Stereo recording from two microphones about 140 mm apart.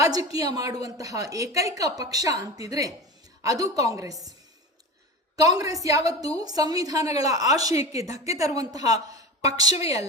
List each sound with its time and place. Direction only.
0.0 s a woman's voice: 25° right (ahead or behind)
5.4 s a woman's voice: 25° right (ahead or behind)